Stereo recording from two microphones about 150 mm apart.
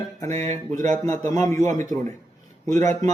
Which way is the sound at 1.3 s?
20° left (ahead or behind).